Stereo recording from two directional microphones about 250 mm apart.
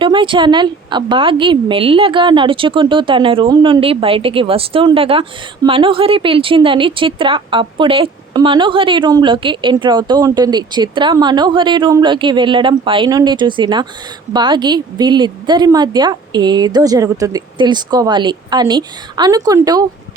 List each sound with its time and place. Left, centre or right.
0.0 s a woman's voice: centre